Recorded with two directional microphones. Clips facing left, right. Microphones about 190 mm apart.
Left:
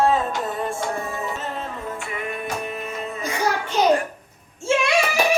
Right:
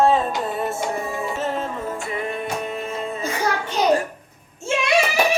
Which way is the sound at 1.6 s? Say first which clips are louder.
Right 3 dB; 35° right (ahead or behind).